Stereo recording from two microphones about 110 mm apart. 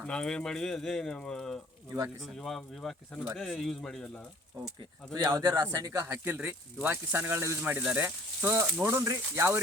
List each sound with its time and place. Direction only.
0.0 s speech: 10° left (ahead or behind)
5.1 s speech: 35° right (ahead or behind)
6.2 s speech: 15° right (ahead or behind)